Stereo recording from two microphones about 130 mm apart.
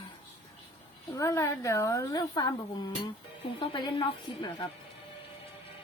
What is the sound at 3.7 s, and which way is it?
Speech, 35° left (ahead or behind).